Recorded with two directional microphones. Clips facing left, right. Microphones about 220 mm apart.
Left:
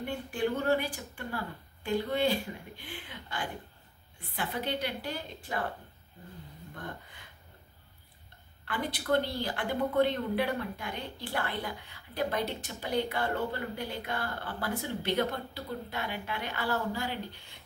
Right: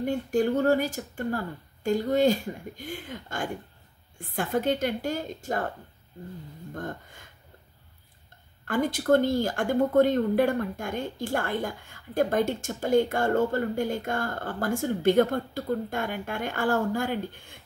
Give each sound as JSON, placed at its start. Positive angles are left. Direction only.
{"t": 0.0, "sound": "a woman's voice", "side_deg": -40}
{"t": 6.7, "sound": "a woman's voice", "side_deg": -45}
{"t": 8.6, "sound": "a woman's voice", "side_deg": -45}